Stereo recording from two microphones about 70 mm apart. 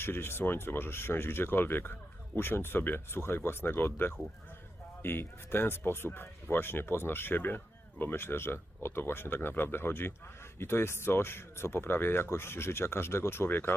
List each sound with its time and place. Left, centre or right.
0.0 s speech: left